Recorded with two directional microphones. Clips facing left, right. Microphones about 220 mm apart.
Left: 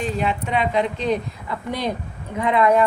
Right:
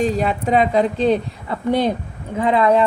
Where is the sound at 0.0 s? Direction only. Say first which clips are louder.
Right 5 dB; 40° right (ahead or behind).